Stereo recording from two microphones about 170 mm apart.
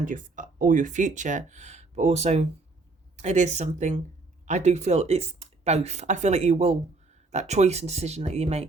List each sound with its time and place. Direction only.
0.0 s speech: 50° right (ahead or behind)